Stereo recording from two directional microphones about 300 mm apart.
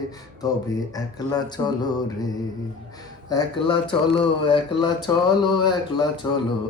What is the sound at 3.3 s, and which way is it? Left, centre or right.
Speech, centre.